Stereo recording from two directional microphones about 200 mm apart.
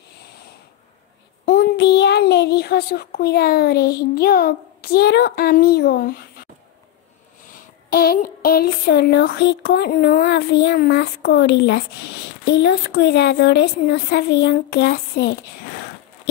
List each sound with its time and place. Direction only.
1.4 s a child's voice: 50° left (ahead or behind)
7.5 s speech: 50° left (ahead or behind)